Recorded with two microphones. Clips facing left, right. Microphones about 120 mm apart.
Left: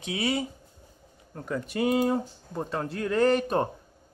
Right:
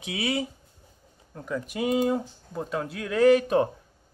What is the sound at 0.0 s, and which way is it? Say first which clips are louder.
Speech: even; centre (ahead or behind).